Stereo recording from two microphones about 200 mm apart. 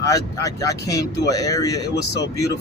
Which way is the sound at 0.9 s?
55° left (ahead or behind).